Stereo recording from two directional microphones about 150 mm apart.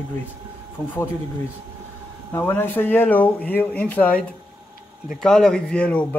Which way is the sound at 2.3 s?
15° left (ahead or behind).